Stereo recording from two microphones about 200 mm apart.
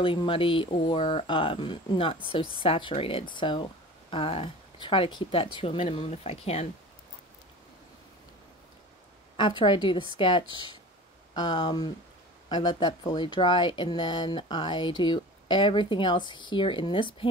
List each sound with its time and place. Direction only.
0.0 s speech: 25° left (ahead or behind)
9.4 s speech: 25° left (ahead or behind)